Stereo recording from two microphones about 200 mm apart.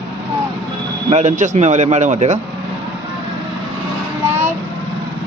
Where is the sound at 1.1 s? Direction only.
35° right (ahead or behind).